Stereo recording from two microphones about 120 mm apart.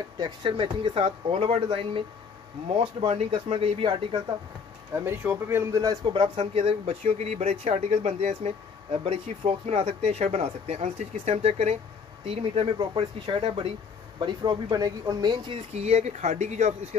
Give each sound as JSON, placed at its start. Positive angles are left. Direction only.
{"t": 0.2, "sound": "speech", "side_deg": -45}
{"t": 3.1, "sound": "speech", "side_deg": -55}
{"t": 4.9, "sound": "speech", "side_deg": -20}
{"t": 6.1, "sound": "speech", "side_deg": -50}
{"t": 12.3, "sound": "speech", "side_deg": -50}
{"t": 15.7, "sound": "speech", "side_deg": -65}